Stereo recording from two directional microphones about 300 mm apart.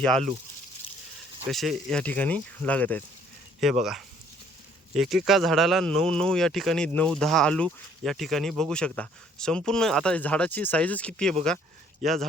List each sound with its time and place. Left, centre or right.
1.5 s a man's voice: centre
4.9 s a man's voice: centre